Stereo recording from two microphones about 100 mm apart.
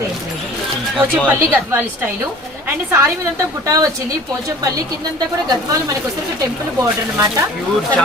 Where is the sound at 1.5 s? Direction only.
20° right (ahead or behind).